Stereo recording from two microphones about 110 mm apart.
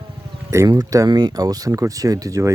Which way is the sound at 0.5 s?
30° right (ahead or behind).